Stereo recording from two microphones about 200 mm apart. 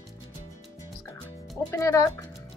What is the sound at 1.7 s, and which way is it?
Speech, 15° left (ahead or behind).